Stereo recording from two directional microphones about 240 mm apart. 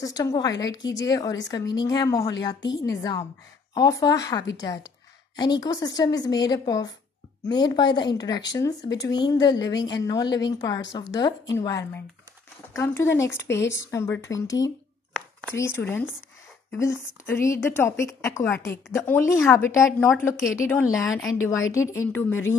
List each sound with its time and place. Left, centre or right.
0.0 s speech: centre